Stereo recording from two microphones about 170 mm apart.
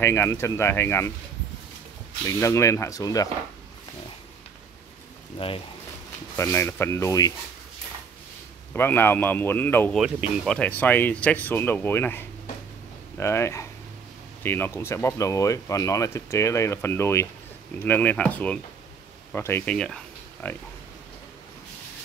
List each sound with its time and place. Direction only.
0.0 s speech: 15° left (ahead or behind)
2.2 s speech: 15° left (ahead or behind)
6.3 s speech: 15° left (ahead or behind)
8.7 s speech: 15° left (ahead or behind)
9.9 s speech: centre (ahead or behind)